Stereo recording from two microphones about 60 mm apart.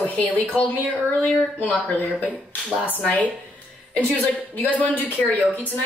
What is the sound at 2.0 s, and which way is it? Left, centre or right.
Speech, left.